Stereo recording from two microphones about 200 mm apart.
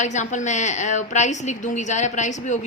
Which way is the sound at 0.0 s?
35° left (ahead or behind).